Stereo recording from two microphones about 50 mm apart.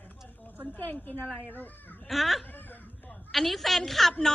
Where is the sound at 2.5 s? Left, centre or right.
Left.